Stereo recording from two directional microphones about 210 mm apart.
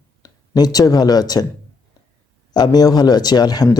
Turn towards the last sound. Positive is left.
turn(degrees=20)  # may be behind; listen again after turning